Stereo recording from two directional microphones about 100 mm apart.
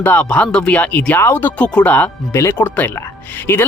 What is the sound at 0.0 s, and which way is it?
Speech, 15° left (ahead or behind).